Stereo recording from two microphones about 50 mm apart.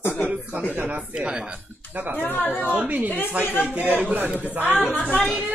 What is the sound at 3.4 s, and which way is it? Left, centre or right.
Speech, right.